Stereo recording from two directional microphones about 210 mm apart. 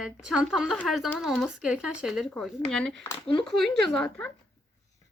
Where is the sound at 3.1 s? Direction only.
25° left (ahead or behind).